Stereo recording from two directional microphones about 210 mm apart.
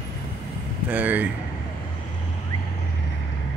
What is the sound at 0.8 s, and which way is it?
Speech, 10° right (ahead or behind).